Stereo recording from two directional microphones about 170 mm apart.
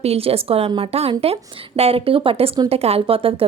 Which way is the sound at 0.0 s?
35° right (ahead or behind).